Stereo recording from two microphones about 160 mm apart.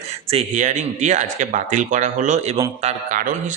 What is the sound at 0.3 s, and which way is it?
Speech, 45° right (ahead or behind).